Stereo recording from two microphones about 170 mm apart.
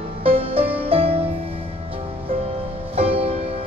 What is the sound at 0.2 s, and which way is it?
Music, 35° right (ahead or behind).